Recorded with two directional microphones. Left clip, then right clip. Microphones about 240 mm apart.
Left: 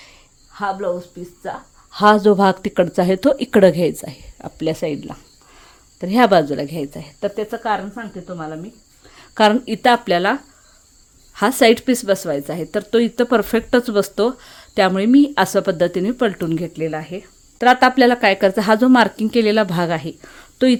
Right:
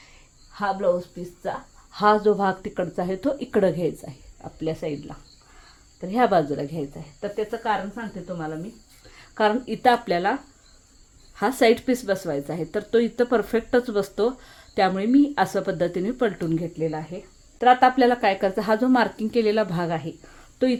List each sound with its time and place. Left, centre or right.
0.5 s speech: left
1.9 s speech: left
11.3 s speech: left